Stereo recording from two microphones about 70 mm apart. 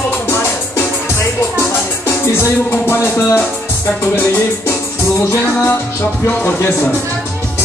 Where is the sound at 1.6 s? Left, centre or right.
Left.